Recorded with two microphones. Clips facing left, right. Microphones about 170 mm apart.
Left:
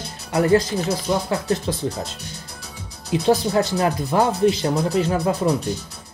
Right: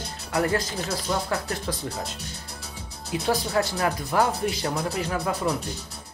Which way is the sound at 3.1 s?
25° left (ahead or behind).